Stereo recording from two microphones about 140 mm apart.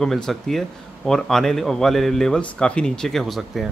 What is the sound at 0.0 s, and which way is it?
A man's voice, 5° left (ahead or behind).